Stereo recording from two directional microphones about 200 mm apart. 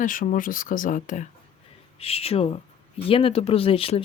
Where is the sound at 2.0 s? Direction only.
30° left (ahead or behind).